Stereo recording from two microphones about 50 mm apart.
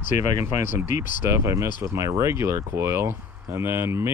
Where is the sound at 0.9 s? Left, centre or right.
Right.